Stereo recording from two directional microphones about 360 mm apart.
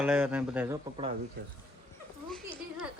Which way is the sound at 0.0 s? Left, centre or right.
Centre.